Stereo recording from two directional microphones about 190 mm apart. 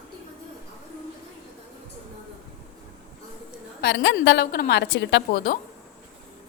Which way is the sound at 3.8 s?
70° left (ahead or behind).